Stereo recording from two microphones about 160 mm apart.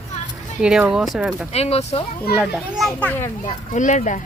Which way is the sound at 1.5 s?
40° left (ahead or behind).